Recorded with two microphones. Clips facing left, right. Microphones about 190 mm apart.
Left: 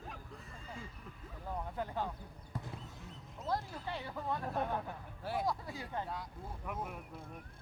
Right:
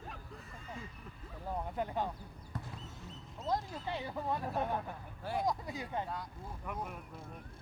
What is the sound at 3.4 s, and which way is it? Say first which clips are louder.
Speech: right 2 dB; 15° right (ahead or behind).